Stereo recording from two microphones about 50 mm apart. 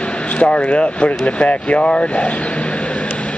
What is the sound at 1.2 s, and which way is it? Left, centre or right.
Speech, left.